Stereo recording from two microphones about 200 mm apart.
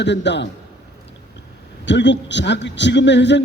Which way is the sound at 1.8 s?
65° left (ahead or behind).